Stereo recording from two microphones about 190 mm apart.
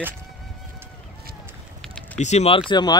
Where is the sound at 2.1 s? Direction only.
35° left (ahead or behind).